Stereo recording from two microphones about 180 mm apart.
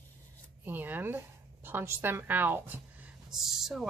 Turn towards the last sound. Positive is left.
turn(degrees=0)  # may be behind; listen again after turning